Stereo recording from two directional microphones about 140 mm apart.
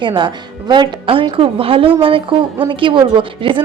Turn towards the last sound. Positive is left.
turn(degrees=-35)  # may be behind; listen again after turning